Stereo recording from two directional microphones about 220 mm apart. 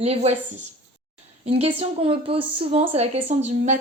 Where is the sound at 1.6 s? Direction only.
25° right (ahead or behind).